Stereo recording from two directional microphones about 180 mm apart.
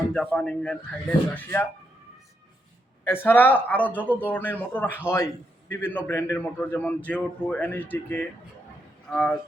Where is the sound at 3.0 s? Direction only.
10° left (ahead or behind).